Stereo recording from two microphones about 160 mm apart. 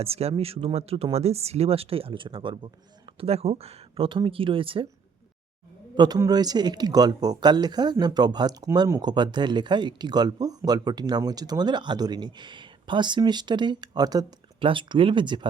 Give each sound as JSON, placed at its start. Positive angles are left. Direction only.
{"t": 0.0, "sound": "speech", "side_deg": -40}
{"t": 6.0, "sound": "speech", "side_deg": -25}